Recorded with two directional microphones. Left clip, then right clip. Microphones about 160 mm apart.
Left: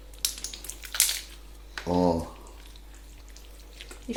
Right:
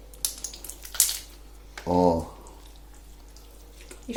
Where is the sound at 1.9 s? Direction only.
Centre (ahead or behind).